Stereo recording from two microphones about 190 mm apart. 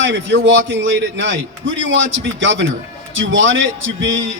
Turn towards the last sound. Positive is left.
turn(degrees=-85)